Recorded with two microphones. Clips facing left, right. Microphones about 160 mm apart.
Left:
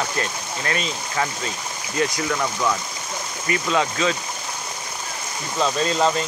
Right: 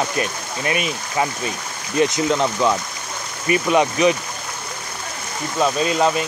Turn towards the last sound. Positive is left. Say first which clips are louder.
# right 2 dB
turn(degrees=-10)  # may be behind; listen again after turning